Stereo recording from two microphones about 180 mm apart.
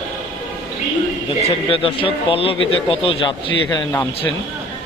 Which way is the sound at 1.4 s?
30° left (ahead or behind).